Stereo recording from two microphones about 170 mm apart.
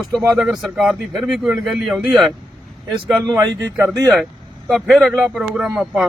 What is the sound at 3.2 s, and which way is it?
Speech, 20° right (ahead or behind).